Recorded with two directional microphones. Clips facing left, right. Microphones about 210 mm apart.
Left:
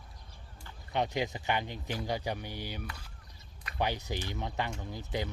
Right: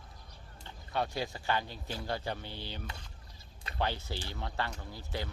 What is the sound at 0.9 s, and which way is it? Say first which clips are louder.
Speech: left 3 dB; 20° left (ahead or behind).